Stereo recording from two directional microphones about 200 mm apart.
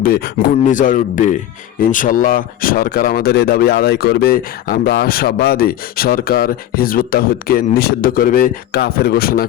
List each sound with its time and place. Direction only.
0.0 s speech: 45° left (ahead or behind)